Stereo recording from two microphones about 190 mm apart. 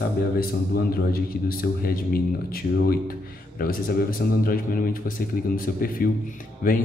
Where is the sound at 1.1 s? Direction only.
50° left (ahead or behind).